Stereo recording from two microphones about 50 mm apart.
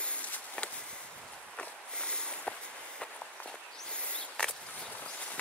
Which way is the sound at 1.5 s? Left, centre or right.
Centre.